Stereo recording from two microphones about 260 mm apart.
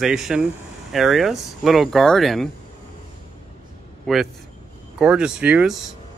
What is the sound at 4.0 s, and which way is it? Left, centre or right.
A man's voice, centre.